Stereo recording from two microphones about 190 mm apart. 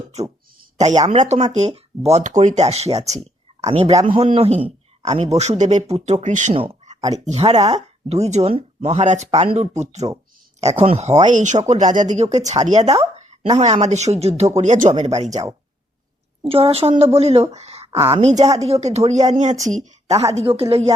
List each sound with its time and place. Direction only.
1.0 s a woman's voice: 35° right (ahead or behind)
6.5 s a sound: 30° right (ahead or behind)
7.3 s a woman's voice: 30° right (ahead or behind)
16.4 s a woman's voice: 30° right (ahead or behind)